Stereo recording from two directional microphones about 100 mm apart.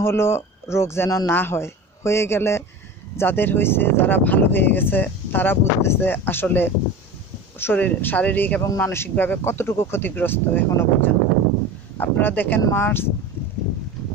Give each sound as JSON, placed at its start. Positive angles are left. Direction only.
{"t": 0.0, "sound": "speech", "side_deg": 25}